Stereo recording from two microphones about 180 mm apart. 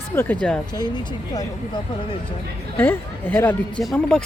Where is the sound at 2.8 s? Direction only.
10° left (ahead or behind).